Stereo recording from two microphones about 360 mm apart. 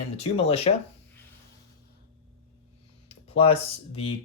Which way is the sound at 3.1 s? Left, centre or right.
Centre.